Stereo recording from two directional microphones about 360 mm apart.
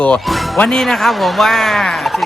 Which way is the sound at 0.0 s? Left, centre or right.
Centre.